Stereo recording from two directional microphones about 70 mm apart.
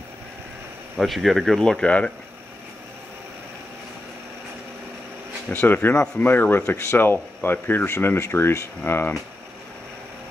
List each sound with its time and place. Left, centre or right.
0.9 s speech: centre
5.5 s speech: left